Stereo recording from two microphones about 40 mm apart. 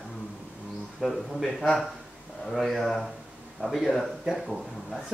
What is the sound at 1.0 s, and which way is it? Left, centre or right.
Speech, centre.